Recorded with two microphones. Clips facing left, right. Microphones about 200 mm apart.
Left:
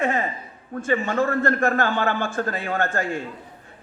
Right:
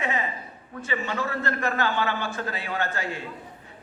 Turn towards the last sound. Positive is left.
turn(degrees=50)  # may be behind; listen again after turning